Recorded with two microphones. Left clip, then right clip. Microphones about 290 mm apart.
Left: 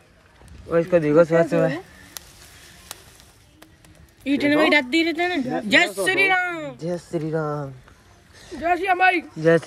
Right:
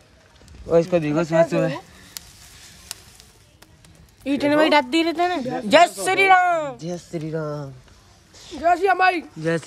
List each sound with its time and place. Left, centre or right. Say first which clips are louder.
0.7 s speech: right 1 dB; centre
1.0 s speech: left 3 dB; centre
2.2 s a sound: right 2 dB; centre
4.2 s speech: right 1 dB; centre
6.8 s speech: left 3 dB; centre
8.6 s speech: right 1 dB; centre
9.4 s speech: left 7 dB; centre